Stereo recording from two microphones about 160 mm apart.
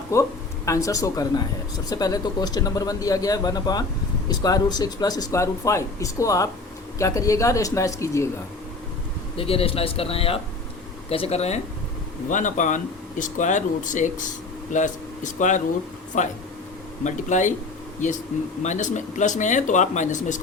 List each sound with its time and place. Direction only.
0.1 s speech: 20° left (ahead or behind)
9.4 s speech: 35° left (ahead or behind)